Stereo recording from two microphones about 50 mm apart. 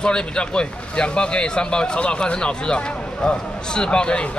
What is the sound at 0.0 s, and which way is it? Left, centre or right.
Speech, centre.